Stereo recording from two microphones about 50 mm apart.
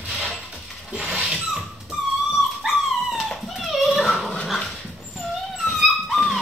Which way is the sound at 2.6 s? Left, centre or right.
Centre.